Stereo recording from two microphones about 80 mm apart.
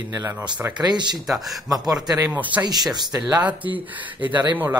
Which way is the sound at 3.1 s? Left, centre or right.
Right.